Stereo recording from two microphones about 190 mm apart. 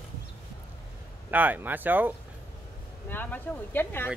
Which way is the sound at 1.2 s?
10° right (ahead or behind).